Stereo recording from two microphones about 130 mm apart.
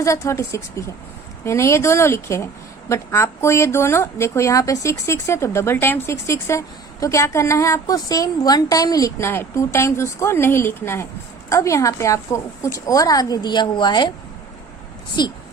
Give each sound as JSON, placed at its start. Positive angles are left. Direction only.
{"t": 0.0, "sound": "speech", "side_deg": 20}